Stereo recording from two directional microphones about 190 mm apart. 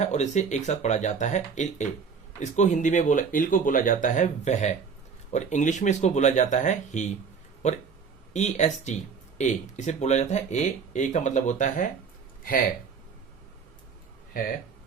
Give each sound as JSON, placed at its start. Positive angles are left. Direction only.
{"t": 0.0, "sound": "speech", "side_deg": 40}